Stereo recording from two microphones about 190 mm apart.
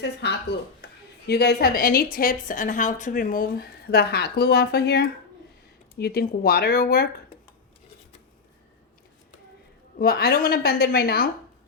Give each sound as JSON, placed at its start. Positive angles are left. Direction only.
{"t": 0.0, "sound": "a woman's voice", "side_deg": 60}
{"t": 10.0, "sound": "a woman's voice", "side_deg": 55}